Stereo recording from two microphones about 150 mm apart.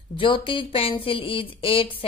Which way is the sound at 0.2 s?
35° left (ahead or behind).